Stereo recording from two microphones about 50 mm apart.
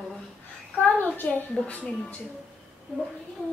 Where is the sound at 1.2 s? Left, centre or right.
Left.